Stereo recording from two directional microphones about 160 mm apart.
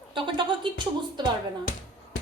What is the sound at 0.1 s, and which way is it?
Music, 30° right (ahead or behind).